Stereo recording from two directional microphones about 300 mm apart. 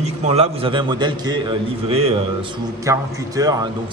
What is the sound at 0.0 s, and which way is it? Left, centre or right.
A man's voice, right.